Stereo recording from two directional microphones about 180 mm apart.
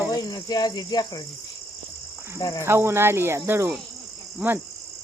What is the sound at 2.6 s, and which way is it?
Cricket, 15° right (ahead or behind).